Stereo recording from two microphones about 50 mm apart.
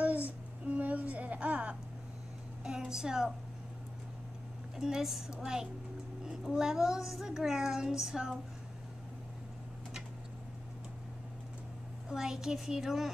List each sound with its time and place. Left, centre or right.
0.0 s a sound: right
2.8 s a woman's voice: centre
4.7 s a child's voice: centre
12.1 s a child's voice: centre